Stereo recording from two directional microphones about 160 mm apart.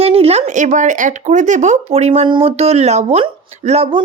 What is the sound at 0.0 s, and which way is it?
A woman's voice, 40° right (ahead or behind).